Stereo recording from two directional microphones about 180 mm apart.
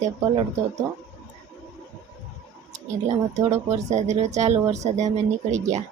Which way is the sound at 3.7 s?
40° right (ahead or behind).